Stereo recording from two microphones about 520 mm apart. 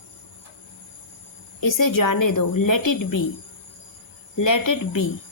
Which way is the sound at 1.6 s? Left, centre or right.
Left.